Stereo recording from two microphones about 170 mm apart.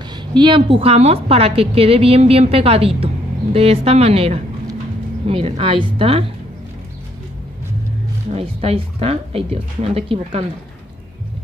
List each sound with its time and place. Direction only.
0.4 s a woman's voice: 30° right (ahead or behind)
8.3 s a woman's voice: 35° right (ahead or behind)